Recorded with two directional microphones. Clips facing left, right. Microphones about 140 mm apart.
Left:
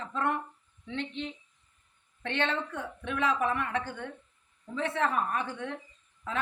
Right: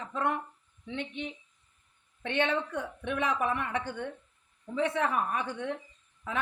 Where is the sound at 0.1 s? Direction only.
15° right (ahead or behind).